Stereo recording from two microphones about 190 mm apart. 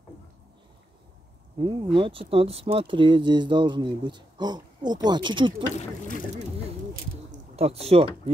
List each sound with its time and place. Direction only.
1.6 s speech: 25° right (ahead or behind)
5.8 s speech: 45° left (ahead or behind)
7.2 s a sound: 30° right (ahead or behind)